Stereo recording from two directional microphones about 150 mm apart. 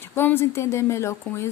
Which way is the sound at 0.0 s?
15° left (ahead or behind).